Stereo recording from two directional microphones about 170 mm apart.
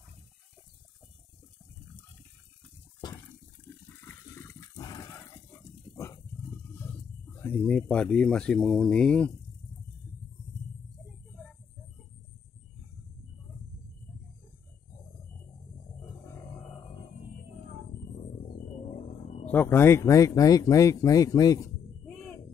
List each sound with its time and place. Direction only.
4.0 s water: 15° left (ahead or behind)
7.4 s speech: 10° left (ahead or behind)
19.5 s speech: 15° left (ahead or behind)